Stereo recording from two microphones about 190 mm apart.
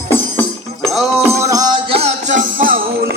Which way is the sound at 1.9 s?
35° right (ahead or behind).